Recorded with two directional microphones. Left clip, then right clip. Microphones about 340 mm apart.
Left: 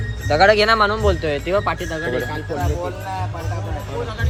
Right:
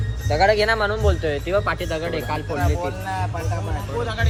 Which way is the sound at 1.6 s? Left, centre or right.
Centre.